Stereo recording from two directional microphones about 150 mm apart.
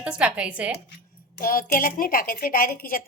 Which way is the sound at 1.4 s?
70° left (ahead or behind).